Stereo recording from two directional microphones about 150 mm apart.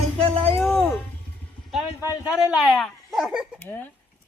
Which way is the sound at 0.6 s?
10° left (ahead or behind).